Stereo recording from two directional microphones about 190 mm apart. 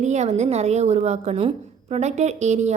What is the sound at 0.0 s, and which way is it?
A woman's voice, 35° right (ahead or behind).